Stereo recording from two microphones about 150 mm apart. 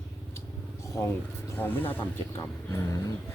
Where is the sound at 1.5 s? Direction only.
10° left (ahead or behind).